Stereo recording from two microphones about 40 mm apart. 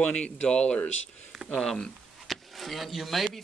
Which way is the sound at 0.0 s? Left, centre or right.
Left.